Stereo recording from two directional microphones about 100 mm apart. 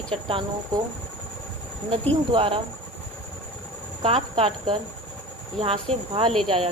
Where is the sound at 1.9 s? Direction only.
80° right.